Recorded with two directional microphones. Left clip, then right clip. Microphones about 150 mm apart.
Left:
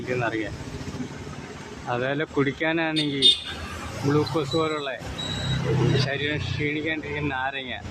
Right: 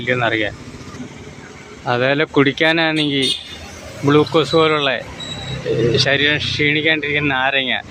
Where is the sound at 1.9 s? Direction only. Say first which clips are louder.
Right 10 dB; 25° right (ahead or behind).